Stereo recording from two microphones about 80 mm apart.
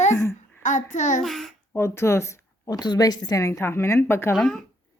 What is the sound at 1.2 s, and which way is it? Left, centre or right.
Speech, centre.